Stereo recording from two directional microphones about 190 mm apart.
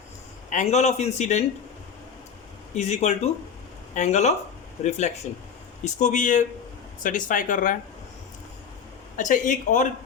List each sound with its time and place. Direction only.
0.5 s a man's voice: 35° left (ahead or behind)
2.7 s a man's voice: 35° left (ahead or behind)
9.1 s a man's voice: 40° left (ahead or behind)